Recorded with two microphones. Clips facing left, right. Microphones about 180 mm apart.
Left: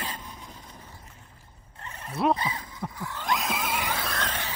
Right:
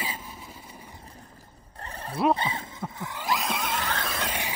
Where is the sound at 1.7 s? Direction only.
35° right (ahead or behind).